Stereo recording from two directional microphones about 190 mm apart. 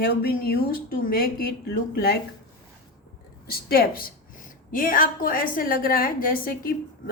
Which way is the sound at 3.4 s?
55° left (ahead or behind).